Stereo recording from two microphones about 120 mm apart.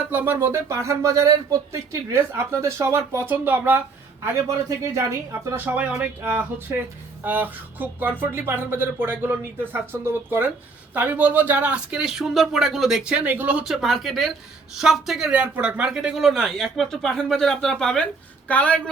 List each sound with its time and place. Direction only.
0.1 s speech: 15° right (ahead or behind); by 18.8 s 10° left (ahead or behind)